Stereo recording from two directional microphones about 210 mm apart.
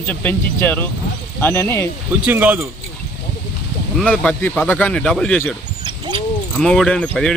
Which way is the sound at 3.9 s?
5° left (ahead or behind).